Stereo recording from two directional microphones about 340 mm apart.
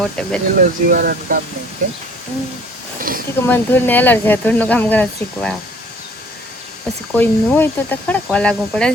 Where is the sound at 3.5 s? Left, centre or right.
Centre.